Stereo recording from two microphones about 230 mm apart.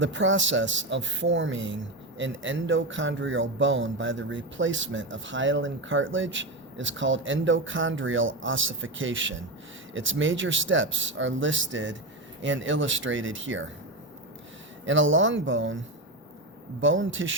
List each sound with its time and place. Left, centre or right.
0.0 s speech: right
14.8 s speech: right
16.8 s speech: right